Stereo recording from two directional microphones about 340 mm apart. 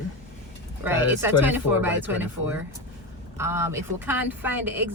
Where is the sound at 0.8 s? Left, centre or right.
Centre.